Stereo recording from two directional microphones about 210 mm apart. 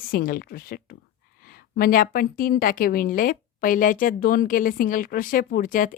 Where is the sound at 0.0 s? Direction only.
45° left (ahead or behind).